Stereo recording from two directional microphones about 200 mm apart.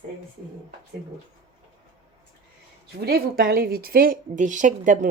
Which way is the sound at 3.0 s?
50° right (ahead or behind).